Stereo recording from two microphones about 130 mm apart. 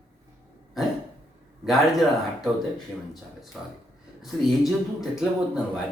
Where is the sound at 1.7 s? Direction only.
Centre (ahead or behind).